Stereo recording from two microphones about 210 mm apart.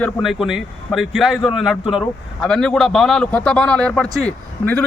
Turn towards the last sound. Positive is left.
turn(degrees=5)  # may be behind; listen again after turning